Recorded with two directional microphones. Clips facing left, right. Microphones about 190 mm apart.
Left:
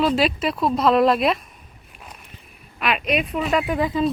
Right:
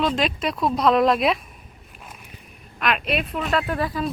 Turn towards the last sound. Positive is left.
turn(degrees=20)  # may be behind; listen again after turning